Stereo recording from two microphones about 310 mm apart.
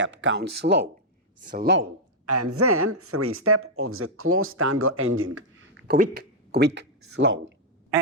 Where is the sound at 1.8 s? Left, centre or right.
Right.